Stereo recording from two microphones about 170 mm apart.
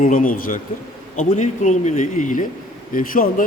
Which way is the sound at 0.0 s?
55° left (ahead or behind).